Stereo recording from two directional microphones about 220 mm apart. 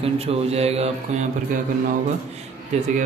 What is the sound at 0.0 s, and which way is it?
Speech, 25° right (ahead or behind).